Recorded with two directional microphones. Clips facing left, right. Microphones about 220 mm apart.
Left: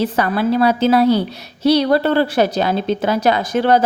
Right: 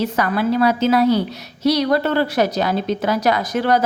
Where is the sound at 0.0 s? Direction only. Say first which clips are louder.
Left 2 dB; 30° left (ahead or behind).